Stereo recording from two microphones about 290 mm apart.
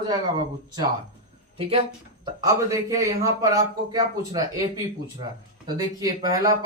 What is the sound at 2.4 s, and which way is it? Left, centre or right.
Speech, centre.